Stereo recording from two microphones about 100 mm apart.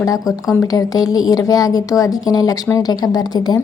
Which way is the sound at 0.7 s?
40° left (ahead or behind).